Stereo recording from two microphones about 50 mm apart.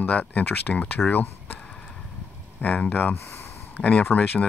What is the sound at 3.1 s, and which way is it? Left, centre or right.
Speech, left.